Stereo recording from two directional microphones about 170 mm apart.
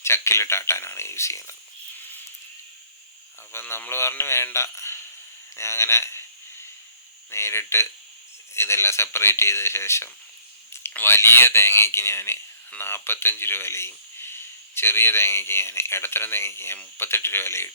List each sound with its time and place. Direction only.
0.0 s speech: 15° left (ahead or behind)
3.5 s speech: 15° left (ahead or behind)
7.3 s speech: 15° left (ahead or behind)